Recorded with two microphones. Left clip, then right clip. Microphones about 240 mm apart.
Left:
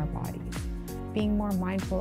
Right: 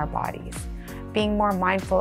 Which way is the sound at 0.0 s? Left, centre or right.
Centre.